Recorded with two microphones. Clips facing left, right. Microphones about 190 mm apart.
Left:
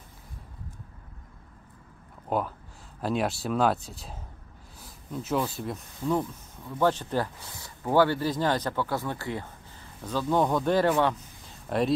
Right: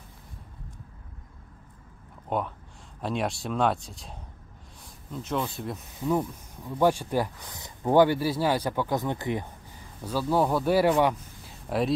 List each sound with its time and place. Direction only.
2.2 s speech: centre (ahead or behind)
4.8 s a sound: 5° left (ahead or behind)
6.6 s speech: 10° right (ahead or behind)
10.0 s speech: 5° right (ahead or behind)